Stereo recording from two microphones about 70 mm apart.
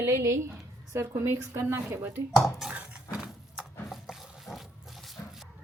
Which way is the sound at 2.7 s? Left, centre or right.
Centre.